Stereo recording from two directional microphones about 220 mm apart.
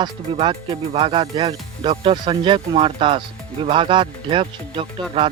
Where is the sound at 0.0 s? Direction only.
20° right (ahead or behind).